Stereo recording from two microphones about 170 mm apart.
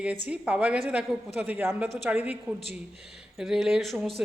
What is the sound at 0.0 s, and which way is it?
A woman's voice, 5° right (ahead or behind).